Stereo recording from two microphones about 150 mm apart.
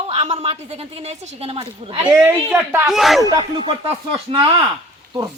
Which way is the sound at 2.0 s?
15° right (ahead or behind).